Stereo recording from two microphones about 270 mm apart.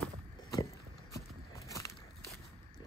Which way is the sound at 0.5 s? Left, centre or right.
Centre.